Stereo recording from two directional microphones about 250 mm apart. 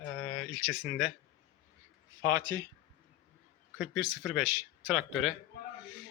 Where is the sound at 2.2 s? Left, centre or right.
Centre.